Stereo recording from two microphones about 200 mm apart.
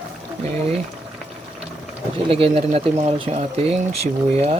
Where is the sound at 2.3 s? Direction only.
30° right (ahead or behind).